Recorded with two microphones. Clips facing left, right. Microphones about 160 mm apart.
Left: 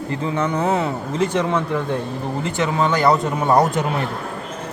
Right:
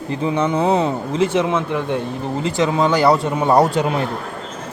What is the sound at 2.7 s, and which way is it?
Speech, 10° right (ahead or behind).